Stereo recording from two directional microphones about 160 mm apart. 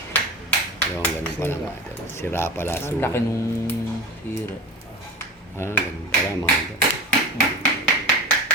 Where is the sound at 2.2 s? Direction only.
15° left (ahead or behind).